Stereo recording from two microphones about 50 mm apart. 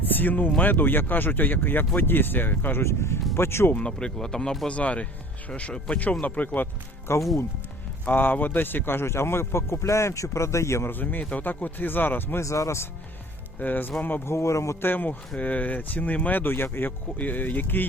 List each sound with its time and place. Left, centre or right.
0.1 s speech: left
2.8 s a man's voice: left
3.8 s speech: centre
4.7 s speech: left
7.1 s speech: left
8.0 s a man's voice: left
10.8 s speech: left
12.4 s speech: left
13.6 s speech: left
14.3 s speech: left
14.8 s speech: left
17.2 s speech: left